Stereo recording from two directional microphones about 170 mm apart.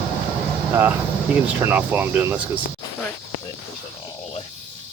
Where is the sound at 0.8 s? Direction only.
10° right (ahead or behind).